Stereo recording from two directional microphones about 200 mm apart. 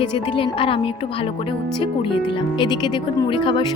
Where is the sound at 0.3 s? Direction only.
25° left (ahead or behind).